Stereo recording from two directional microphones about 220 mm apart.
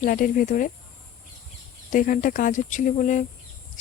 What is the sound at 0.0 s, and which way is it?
Speech, 40° left (ahead or behind).